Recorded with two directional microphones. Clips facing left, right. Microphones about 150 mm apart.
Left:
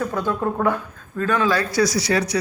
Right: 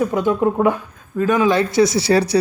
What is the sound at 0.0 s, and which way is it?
Speech, 15° right (ahead or behind).